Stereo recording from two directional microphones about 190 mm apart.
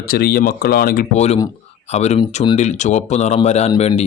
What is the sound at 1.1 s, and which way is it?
Speech, 35° left (ahead or behind).